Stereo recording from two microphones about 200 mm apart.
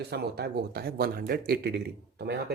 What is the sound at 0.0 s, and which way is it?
Speech, 55° right (ahead or behind).